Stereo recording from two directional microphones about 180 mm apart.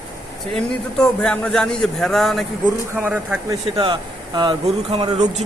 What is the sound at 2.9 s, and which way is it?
Speech, 10° right (ahead or behind).